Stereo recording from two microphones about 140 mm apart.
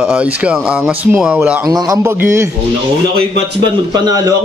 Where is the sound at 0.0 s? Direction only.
10° right (ahead or behind).